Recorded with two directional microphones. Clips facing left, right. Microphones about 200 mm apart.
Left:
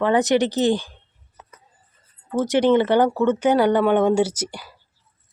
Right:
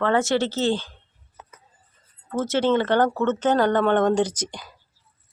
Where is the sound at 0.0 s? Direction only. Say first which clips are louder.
Left 3 dB; 15° left (ahead or behind).